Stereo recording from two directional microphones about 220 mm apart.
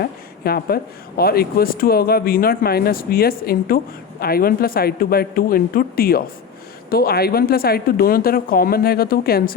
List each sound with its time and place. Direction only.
0.0 s speech: 45° left (ahead or behind)